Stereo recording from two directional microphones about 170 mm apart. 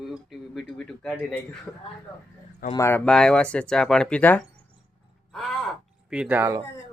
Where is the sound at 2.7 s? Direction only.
15° left (ahead or behind).